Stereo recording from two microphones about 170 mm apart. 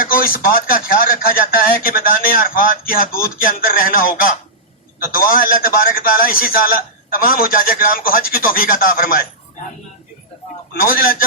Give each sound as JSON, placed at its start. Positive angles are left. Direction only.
{"t": 0.0, "sound": "speech", "side_deg": 60}
{"t": 10.8, "sound": "speech", "side_deg": 60}